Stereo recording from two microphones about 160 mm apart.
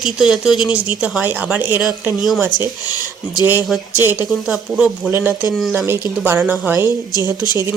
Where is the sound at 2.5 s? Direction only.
55° left (ahead or behind).